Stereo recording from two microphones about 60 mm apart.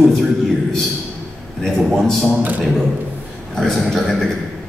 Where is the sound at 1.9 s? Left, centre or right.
Centre.